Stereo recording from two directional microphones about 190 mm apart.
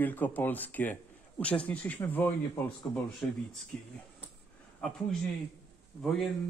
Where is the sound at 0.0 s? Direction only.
10° left (ahead or behind).